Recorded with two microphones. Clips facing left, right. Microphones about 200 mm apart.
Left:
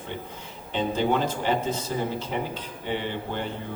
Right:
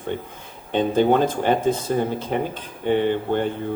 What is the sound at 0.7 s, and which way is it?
Speech, 55° right (ahead or behind).